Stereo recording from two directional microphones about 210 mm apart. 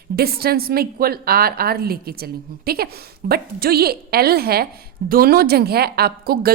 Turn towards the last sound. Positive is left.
turn(degrees=-45)  # may be behind; listen again after turning